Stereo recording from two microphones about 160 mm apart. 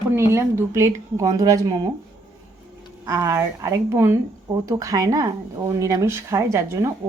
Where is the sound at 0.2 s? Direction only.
15° right (ahead or behind).